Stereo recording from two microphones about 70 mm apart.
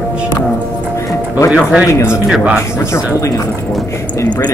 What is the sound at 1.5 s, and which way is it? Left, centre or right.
Speech, centre.